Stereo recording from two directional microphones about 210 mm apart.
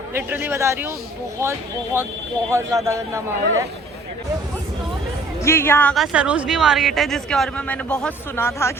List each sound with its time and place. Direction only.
0.1 s a man's voice: 10° right (ahead or behind)
5.4 s a woman's voice: 10° left (ahead or behind)